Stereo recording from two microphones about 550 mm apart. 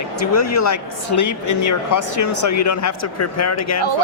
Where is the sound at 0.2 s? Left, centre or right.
Left.